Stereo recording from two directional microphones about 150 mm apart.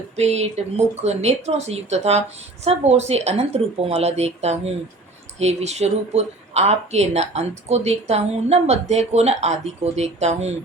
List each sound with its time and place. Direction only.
0.2 s speech: 45° right (ahead or behind)